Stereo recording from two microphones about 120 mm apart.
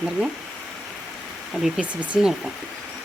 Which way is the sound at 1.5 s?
5° right (ahead or behind).